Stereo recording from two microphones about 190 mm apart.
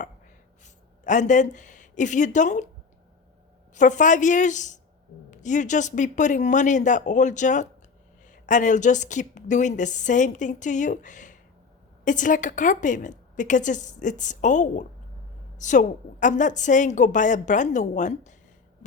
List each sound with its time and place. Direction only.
0.6 s speech: 40° left (ahead or behind)
3.8 s a woman's voice: 40° left (ahead or behind)